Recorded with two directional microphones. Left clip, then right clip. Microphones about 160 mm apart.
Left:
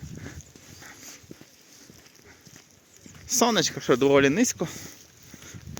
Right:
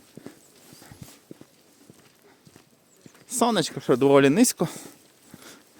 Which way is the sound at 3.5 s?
25° right (ahead or behind).